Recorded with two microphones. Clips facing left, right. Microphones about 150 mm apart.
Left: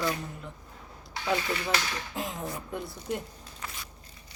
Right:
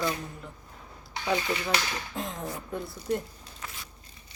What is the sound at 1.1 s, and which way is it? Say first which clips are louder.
Speech: right 1 dB; 15° right (ahead or behind).